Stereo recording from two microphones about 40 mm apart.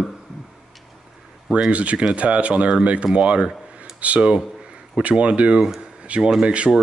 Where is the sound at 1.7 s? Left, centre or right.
Right.